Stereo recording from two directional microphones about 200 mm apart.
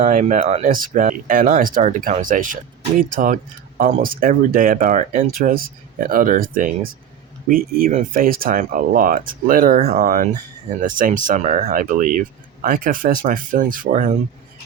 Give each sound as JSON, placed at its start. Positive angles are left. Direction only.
{"t": 0.0, "sound": "speech", "side_deg": -40}